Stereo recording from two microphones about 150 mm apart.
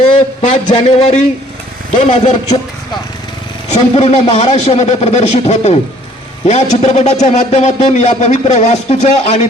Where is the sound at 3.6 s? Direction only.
45° left (ahead or behind).